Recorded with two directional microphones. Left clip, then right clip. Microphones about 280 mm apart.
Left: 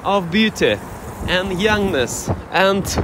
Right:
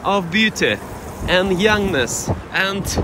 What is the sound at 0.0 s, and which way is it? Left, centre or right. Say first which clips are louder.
Speech: even; centre.